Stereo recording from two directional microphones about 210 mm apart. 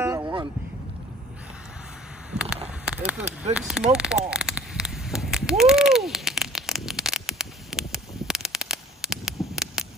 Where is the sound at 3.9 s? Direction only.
5° right (ahead or behind).